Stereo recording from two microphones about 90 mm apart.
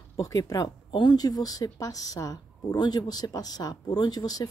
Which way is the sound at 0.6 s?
60° left (ahead or behind).